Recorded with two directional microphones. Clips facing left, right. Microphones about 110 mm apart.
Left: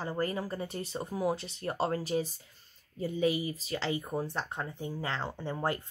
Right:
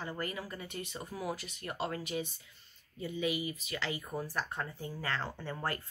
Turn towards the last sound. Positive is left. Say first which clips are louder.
# left 5 dB
turn(degrees=20)  # may be behind; listen again after turning